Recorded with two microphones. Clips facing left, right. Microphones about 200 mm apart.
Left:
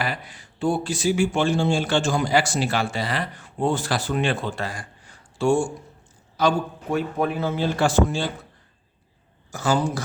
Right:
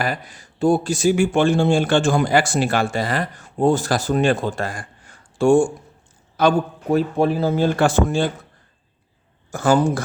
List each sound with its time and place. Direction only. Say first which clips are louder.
0.0 s a man's voice: right 4 dB; 45° right (ahead or behind)
6.9 s speech: right 6 dB; 35° right (ahead or behind); by 8.3 s 50° right (ahead or behind)
9.5 s speech: right 6 dB; 55° right (ahead or behind)